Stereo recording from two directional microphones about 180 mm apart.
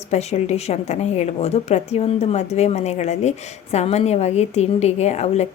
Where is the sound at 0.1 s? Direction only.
35° left (ahead or behind).